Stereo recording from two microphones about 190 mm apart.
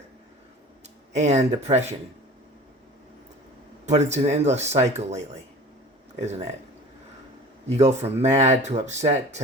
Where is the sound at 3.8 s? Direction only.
35° right (ahead or behind).